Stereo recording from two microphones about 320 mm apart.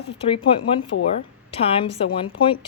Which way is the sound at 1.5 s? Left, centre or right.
Centre.